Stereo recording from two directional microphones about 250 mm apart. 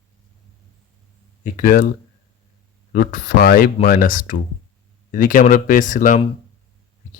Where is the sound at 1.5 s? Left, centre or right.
Left.